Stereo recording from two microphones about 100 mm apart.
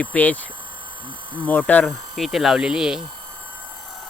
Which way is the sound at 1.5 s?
15° left (ahead or behind).